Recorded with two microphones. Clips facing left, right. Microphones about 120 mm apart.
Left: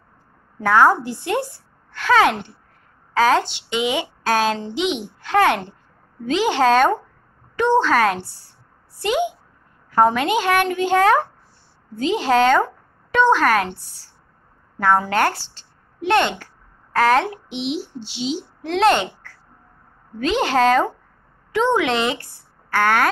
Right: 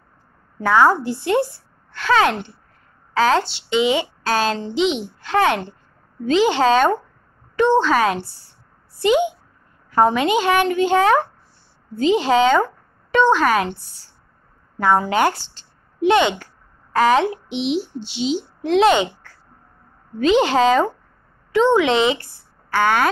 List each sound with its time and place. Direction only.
0.6 s a woman's voice: centre (ahead or behind)
14.8 s a woman's voice: 5° right (ahead or behind)
18.6 s a woman's voice: 5° right (ahead or behind)